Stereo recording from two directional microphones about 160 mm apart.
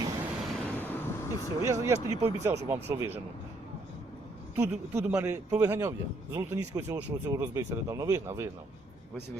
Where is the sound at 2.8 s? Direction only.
15° right (ahead or behind).